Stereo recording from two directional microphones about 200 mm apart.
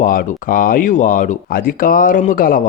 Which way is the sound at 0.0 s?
45° left (ahead or behind).